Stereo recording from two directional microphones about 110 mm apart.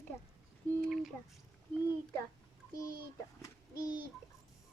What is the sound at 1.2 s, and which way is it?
Speech, 15° left (ahead or behind).